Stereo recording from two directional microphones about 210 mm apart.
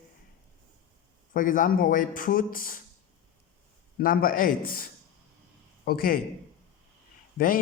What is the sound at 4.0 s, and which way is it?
Speech, 45° left (ahead or behind).